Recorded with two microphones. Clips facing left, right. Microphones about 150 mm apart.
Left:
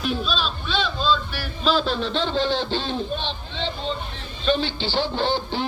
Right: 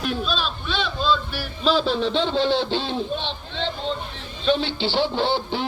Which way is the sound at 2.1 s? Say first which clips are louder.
Right 1 dB; centre (ahead or behind).